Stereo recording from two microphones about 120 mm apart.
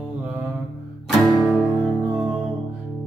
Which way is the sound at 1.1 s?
Centre (ahead or behind).